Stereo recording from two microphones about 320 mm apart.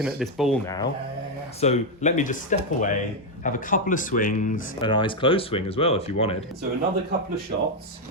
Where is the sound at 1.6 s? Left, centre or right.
Left.